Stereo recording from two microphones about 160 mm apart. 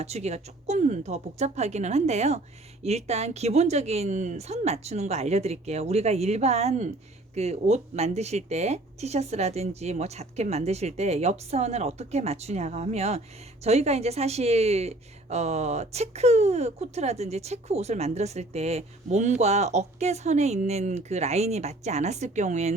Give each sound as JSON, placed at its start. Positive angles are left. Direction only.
{"t": 0.0, "sound": "a woman's voice", "side_deg": -45}